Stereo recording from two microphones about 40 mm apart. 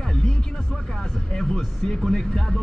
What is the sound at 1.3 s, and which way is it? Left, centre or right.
Speech, centre.